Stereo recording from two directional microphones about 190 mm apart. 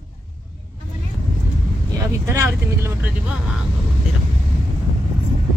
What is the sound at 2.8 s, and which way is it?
Speech, 5° right (ahead or behind).